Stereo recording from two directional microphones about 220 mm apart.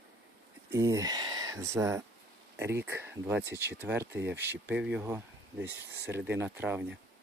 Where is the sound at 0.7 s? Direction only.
15° right (ahead or behind).